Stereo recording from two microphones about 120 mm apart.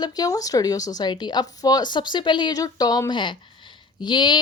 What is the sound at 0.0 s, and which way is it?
A woman's voice, 30° left (ahead or behind).